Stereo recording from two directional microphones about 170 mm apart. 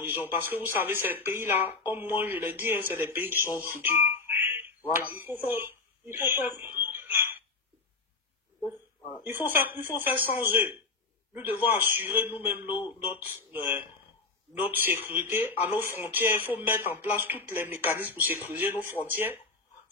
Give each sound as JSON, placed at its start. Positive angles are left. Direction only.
{"t": 0.0, "sound": "speech", "side_deg": -10}
{"t": 5.1, "sound": "a sound", "side_deg": -10}
{"t": 9.2, "sound": "speech", "side_deg": -10}
{"t": 12.7, "sound": "speech", "side_deg": 25}
{"t": 13.1, "sound": "speech", "side_deg": -10}